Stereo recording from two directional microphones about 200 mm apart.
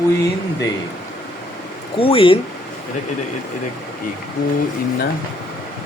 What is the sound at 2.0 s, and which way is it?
Speech, 25° left (ahead or behind).